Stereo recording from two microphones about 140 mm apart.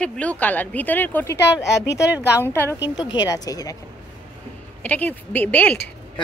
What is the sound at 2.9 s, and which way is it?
Speech, 30° left (ahead or behind).